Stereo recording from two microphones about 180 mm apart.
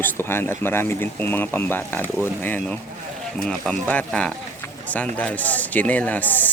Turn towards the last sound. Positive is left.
turn(degrees=10)  # may be behind; listen again after turning